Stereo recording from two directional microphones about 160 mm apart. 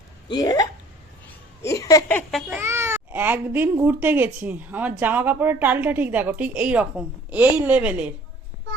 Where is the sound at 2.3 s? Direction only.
Centre (ahead or behind).